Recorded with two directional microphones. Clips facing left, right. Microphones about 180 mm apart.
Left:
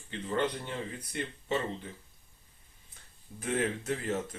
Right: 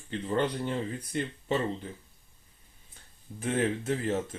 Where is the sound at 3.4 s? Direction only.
30° right (ahead or behind).